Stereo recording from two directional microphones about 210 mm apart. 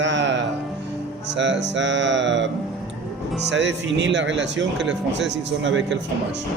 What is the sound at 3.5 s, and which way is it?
Speech, 55° right (ahead or behind).